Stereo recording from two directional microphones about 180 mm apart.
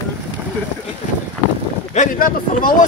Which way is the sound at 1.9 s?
45° left (ahead or behind).